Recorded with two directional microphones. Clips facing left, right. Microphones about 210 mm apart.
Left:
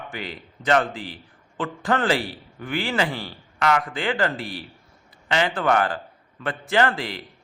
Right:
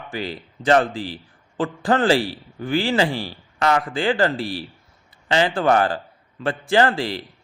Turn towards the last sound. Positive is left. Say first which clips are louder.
# right 4 dB
turn(degrees=-30)  # may be behind; listen again after turning